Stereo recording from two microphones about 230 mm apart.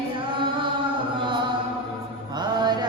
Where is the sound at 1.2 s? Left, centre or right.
Right.